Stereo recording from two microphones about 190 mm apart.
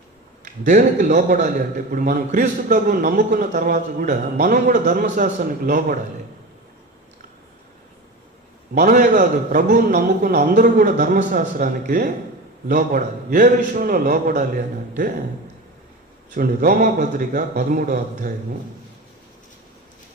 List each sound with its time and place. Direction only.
0.4 s a man's voice: 40° right (ahead or behind)
8.7 s a man's voice: 45° right (ahead or behind)
16.3 s a man's voice: 45° right (ahead or behind)